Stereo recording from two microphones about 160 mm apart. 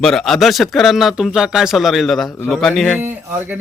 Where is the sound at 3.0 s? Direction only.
15° right (ahead or behind).